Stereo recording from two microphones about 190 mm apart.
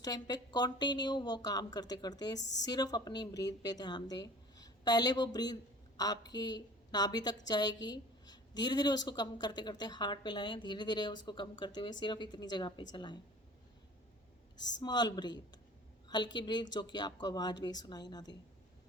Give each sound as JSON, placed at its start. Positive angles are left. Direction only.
{"t": 0.0, "sound": "a woman's voice", "side_deg": 20}
{"t": 2.4, "sound": "a woman's voice", "side_deg": 65}
{"t": 2.6, "sound": "a woman's voice", "side_deg": 20}
{"t": 14.8, "sound": "a woman's voice", "side_deg": 20}